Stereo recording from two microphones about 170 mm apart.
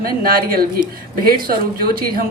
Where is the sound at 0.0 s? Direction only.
60° right (ahead or behind).